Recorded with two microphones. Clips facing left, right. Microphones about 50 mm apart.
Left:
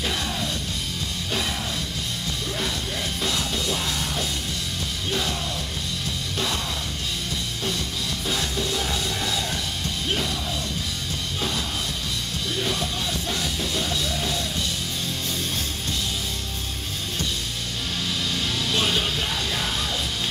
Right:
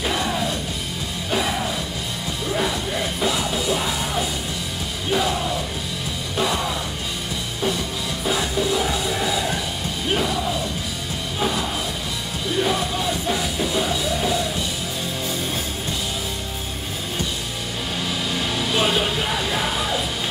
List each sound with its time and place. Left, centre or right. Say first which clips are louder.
0.0 s music: right 5 dB; centre
3.2 s music: right 4 dB; centre
8.3 s music: right 6 dB; centre
12.5 s music: right 6 dB; centre
18.3 s music: right 4 dB; centre